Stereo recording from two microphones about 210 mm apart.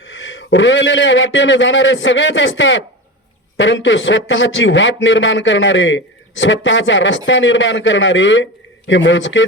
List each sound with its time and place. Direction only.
0.0 s a man's voice: 60° left (ahead or behind)